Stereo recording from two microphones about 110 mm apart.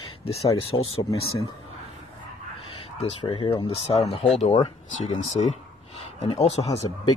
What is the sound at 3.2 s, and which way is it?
Speech, 55° left (ahead or behind).